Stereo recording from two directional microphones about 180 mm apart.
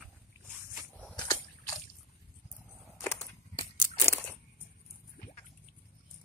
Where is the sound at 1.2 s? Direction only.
25° left (ahead or behind).